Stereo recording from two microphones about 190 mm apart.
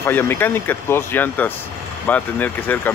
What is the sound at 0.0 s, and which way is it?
Speech, 10° left (ahead or behind).